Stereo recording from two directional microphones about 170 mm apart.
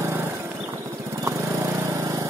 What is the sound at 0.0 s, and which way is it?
Lawn mower, 15° right (ahead or behind).